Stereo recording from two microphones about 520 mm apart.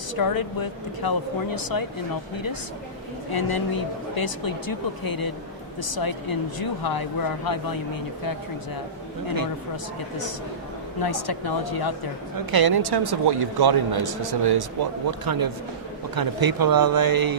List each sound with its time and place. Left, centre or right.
0.2 s speech: left
3.3 s speech: left
11.0 s speech: left
12.5 s a man's voice: right